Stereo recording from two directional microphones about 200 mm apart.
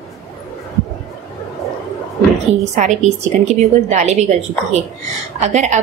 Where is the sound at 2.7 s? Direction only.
35° right (ahead or behind).